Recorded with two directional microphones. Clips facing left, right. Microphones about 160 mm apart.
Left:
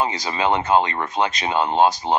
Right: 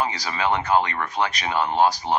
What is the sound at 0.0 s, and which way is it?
Speech, 25° left (ahead or behind).